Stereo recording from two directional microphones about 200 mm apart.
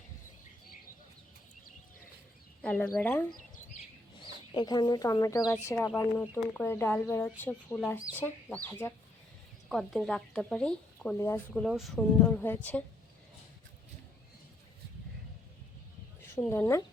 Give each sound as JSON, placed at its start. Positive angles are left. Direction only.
{"t": 2.6, "sound": "speech", "side_deg": 5}
{"t": 4.2, "sound": "speech", "side_deg": 20}
{"t": 11.6, "sound": "speech", "side_deg": 0}
{"t": 16.3, "sound": "speech", "side_deg": 10}